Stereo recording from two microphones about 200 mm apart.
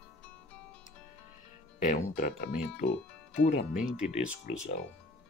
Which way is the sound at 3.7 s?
5° right (ahead or behind).